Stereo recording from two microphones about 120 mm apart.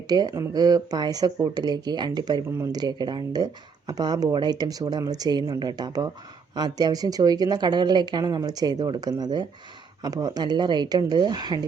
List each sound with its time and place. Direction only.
0.1 s speech: 35° right (ahead or behind)